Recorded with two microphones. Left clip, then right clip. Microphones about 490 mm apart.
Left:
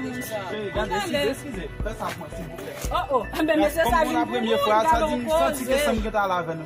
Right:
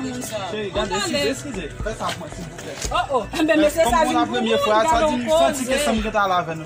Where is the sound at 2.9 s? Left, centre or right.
Left.